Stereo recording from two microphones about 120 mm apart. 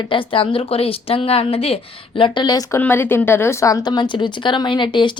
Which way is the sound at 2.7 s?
20° left (ahead or behind).